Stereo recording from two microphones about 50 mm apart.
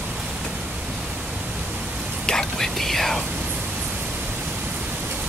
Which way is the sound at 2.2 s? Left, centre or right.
Centre.